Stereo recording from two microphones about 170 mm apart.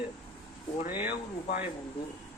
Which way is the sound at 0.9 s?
10° right (ahead or behind).